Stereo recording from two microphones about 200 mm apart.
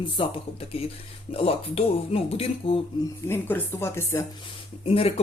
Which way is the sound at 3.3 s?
10° left (ahead or behind).